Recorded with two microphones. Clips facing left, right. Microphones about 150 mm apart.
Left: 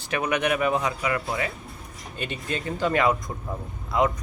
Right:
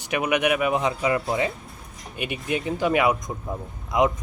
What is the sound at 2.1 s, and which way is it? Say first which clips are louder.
Speech: right 3 dB; 10° right (ahead or behind).